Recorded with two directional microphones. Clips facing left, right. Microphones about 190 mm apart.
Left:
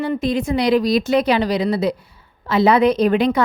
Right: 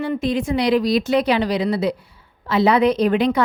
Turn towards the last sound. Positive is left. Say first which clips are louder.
# left 1 dB
turn(degrees=45)  # may be behind; listen again after turning